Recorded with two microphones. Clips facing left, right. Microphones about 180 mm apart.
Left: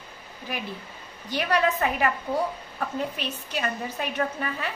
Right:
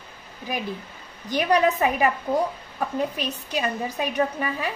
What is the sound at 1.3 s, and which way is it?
Speech, 15° right (ahead or behind).